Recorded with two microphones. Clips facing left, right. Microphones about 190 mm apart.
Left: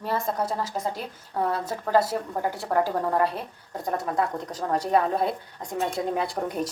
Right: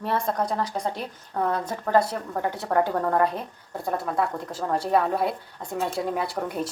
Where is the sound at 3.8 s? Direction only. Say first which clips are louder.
Even; 20° left (ahead or behind).